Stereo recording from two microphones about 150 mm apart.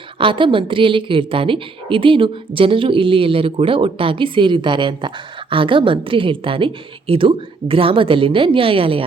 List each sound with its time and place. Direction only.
0.2 s a woman's voice: 35° right (ahead or behind)